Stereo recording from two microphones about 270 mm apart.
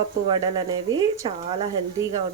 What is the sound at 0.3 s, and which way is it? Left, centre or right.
Speech, centre.